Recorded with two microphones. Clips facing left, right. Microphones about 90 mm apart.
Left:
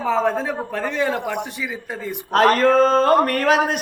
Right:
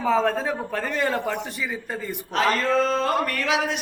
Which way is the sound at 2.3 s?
50° left (ahead or behind).